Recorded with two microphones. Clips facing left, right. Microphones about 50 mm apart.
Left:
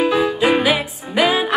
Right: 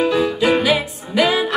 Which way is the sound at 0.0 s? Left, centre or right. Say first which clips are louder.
Even; centre.